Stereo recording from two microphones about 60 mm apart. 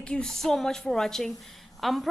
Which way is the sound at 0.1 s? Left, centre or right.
Centre.